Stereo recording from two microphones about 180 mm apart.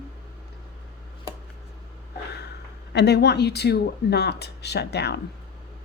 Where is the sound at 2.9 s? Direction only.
65° left (ahead or behind).